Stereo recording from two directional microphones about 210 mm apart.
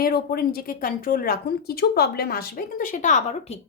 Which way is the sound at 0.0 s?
50° left (ahead or behind).